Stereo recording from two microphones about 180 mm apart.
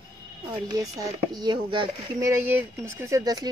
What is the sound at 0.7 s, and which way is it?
A woman's voice, 20° right (ahead or behind).